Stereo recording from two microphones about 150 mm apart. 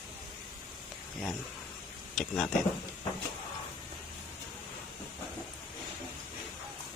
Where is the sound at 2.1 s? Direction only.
Centre (ahead or behind).